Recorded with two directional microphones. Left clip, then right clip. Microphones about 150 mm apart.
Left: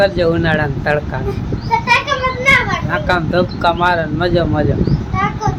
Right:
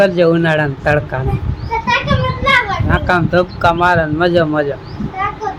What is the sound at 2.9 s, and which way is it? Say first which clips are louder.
Speech: right 3 dB; 20° right (ahead or behind).